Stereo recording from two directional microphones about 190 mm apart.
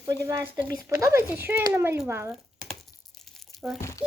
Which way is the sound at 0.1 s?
15° right (ahead or behind).